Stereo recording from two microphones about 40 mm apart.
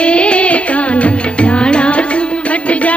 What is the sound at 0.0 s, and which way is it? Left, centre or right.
Music, left.